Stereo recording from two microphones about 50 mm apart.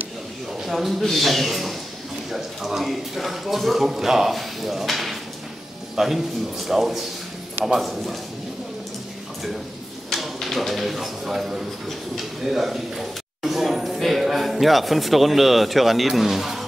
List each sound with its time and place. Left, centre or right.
0.5 s speech: centre
10.1 s speech: centre
13.4 s a sound: centre